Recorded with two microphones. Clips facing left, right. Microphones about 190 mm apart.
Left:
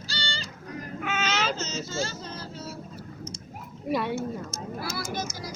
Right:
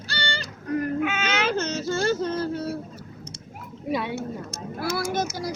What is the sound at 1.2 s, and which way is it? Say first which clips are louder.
Baby cry: right 4 dB; 60° right (ahead or behind).